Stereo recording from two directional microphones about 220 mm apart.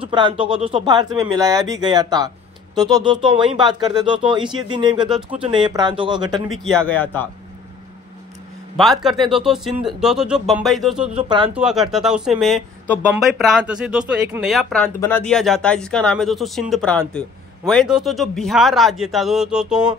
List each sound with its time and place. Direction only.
0.0 s speech: 20° right (ahead or behind)
6.5 s a man's voice: 5° left (ahead or behind)
8.7 s speech: centre (ahead or behind)
11.1 s speech: 20° right (ahead or behind)
11.5 s speech: centre (ahead or behind)